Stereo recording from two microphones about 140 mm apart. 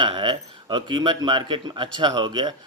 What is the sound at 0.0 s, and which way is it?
A man's voice, 35° right (ahead or behind).